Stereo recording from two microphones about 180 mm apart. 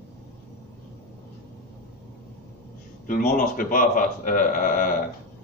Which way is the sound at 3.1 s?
50° left (ahead or behind).